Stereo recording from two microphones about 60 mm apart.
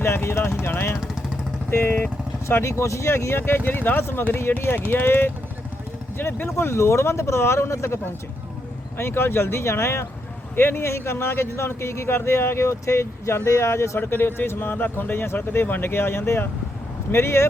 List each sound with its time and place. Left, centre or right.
0.0 s speech: left
2.5 s speech: left
6.6 s speech: left
9.0 s speech: left
14.0 s speech: left